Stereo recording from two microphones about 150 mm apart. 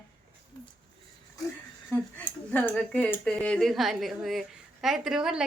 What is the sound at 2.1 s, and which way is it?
A woman's voice, 10° left (ahead or behind).